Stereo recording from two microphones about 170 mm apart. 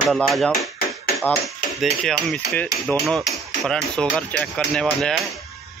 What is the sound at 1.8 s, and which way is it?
Speech, centre (ahead or behind).